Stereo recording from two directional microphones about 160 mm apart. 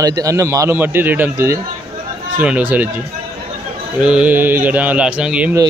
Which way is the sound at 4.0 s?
5° right (ahead or behind).